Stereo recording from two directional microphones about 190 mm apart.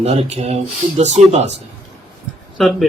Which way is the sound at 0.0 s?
35° right (ahead or behind).